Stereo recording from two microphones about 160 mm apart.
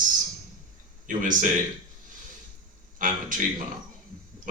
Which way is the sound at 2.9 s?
55° right (ahead or behind).